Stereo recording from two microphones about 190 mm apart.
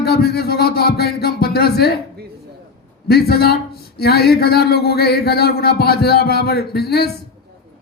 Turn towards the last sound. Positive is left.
turn(degrees=55)  # may be behind; listen again after turning